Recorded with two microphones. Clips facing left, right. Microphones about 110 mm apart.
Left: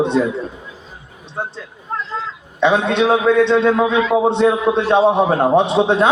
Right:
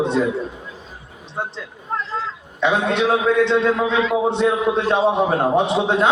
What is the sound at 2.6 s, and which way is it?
A man's voice, 20° left (ahead or behind).